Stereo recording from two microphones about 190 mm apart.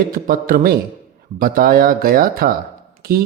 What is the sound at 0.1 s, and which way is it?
Speech, 50° right (ahead or behind).